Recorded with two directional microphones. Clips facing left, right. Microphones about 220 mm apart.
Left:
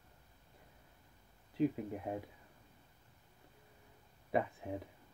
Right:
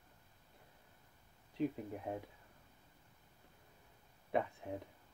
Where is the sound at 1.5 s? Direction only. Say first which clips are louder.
Left 4 dB; 5° left (ahead or behind).